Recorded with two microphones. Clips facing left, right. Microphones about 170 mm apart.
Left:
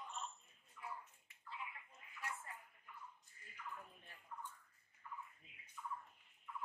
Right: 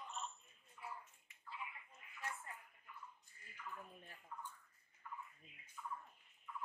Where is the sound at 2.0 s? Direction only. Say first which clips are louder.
Left 1 dB; 30° left (ahead or behind).